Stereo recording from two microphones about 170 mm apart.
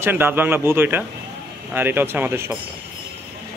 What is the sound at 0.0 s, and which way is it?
A man's voice, 10° right (ahead or behind).